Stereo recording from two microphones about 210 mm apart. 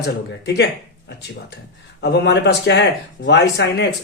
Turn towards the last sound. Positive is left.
turn(degrees=55)  # may be behind; listen again after turning